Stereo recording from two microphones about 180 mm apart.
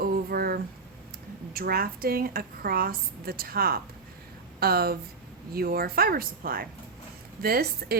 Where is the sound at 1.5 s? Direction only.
55° right (ahead or behind).